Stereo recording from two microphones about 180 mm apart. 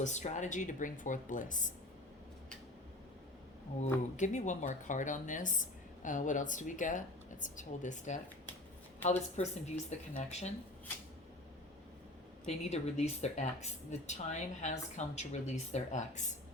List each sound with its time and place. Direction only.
0.0 s speech: 40° left (ahead or behind)
4.2 s speech: 40° left (ahead or behind)
12.5 s speech: 35° left (ahead or behind)